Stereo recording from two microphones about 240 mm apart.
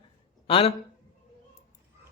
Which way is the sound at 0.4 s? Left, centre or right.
Left.